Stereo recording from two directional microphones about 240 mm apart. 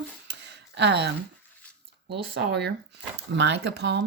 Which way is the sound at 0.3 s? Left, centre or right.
Right.